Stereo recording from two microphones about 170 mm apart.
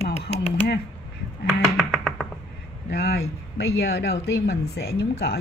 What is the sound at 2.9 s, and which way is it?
Speech, 70° left (ahead or behind).